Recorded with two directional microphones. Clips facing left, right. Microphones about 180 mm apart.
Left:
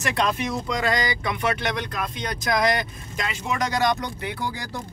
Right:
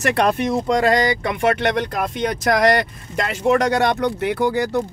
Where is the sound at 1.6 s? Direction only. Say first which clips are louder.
Right 7 dB; 70° right (ahead or behind).